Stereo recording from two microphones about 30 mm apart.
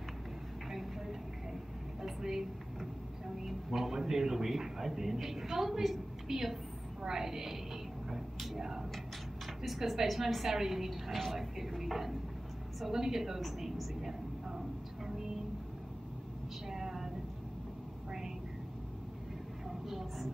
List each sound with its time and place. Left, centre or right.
0.7 s vehicle: centre
3.4 s a man's voice: centre
8.5 s speech: centre
9.7 s a woman's voice: centre
11.1 s a woman's voice: centre
11.3 s speech: centre
16.6 s a sound: centre
19.9 s vehicle: centre